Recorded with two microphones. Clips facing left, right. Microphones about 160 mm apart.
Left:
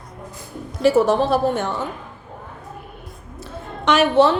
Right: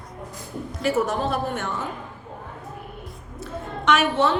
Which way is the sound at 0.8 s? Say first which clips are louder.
Left 7 dB; 30° left (ahead or behind).